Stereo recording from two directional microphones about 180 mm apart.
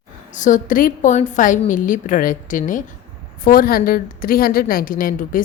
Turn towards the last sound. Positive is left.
turn(degrees=50)  # may be behind; listen again after turning